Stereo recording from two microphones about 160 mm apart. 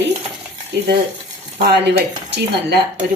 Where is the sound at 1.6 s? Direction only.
90° right.